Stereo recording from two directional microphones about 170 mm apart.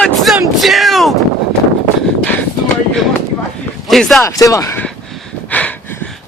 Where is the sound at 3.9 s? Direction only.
Centre (ahead or behind).